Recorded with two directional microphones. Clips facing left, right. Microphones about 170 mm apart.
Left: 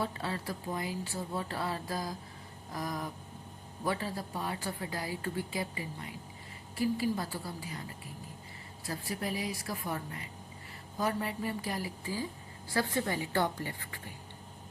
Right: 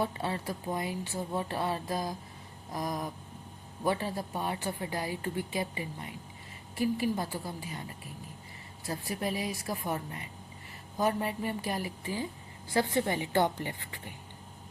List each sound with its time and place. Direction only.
0.0 s a woman's voice: 20° right (ahead or behind)
8.9 s a woman's voice: 25° right (ahead or behind)